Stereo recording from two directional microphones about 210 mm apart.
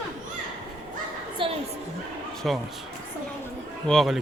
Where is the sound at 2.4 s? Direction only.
Centre (ahead or behind).